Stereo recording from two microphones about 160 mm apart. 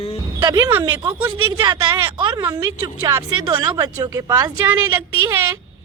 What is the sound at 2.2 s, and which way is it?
A woman's voice, 25° right (ahead or behind).